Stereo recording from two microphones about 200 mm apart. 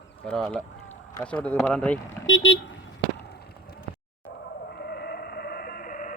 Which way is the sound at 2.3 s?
70° left (ahead or behind).